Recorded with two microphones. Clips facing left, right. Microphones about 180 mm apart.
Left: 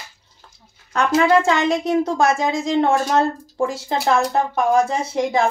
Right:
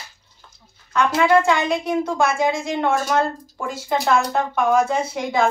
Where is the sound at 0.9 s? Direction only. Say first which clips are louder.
Left 1 dB; 40° left (ahead or behind).